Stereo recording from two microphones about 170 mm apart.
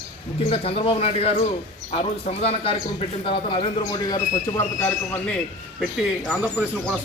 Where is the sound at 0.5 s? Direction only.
35° left (ahead or behind).